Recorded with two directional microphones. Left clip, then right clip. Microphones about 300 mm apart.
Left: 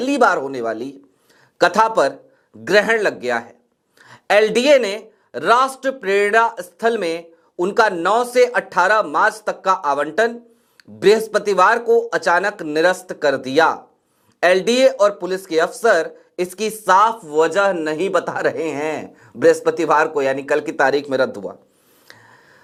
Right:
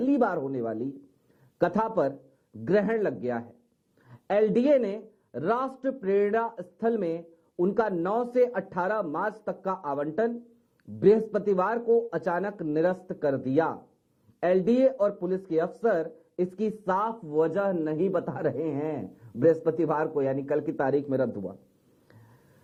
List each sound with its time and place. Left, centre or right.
0.2 s speech: centre
21.2 s speech: centre